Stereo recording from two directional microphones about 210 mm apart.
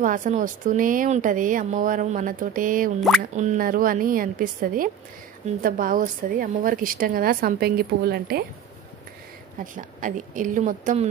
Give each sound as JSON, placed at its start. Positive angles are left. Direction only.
{"t": 0.0, "sound": "a woman's voice", "side_deg": -40}
{"t": 9.8, "sound": "speech", "side_deg": -40}